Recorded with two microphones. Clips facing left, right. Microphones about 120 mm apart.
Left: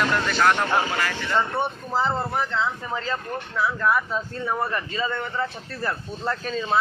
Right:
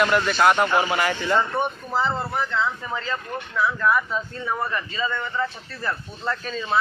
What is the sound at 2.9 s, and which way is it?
Speech, 35° left (ahead or behind).